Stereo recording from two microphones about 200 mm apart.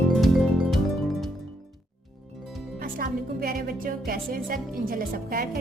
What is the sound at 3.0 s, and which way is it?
Music, 45° right (ahead or behind).